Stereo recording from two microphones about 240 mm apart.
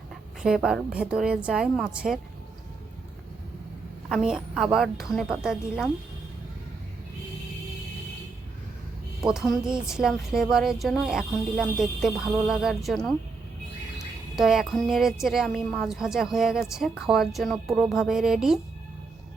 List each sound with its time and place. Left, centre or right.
0.4 s a woman's voice: centre
4.1 s a woman's voice: centre
9.2 s a woman's voice: centre
14.3 s a woman's voice: centre